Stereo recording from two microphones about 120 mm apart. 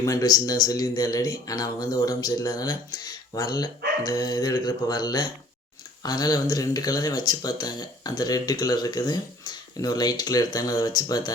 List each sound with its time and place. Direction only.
0.0 s speech: 30° left (ahead or behind)